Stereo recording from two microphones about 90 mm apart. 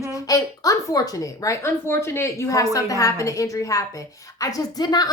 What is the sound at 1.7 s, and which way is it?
A woman's voice, 25° left (ahead or behind).